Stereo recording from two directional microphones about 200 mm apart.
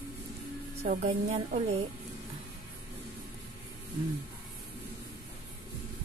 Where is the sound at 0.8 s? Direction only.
30° right (ahead or behind).